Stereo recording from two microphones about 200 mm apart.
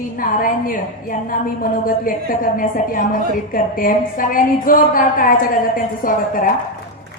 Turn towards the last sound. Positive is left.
turn(degrees=45)  # may be behind; listen again after turning